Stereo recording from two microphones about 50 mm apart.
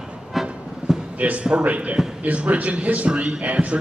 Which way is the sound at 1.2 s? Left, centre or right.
Right.